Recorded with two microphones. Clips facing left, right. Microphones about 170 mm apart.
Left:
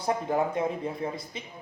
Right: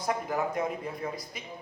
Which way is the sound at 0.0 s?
30° left (ahead or behind).